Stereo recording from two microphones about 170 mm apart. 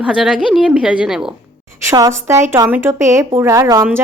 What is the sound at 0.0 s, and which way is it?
A woman's voice, 5° right (ahead or behind).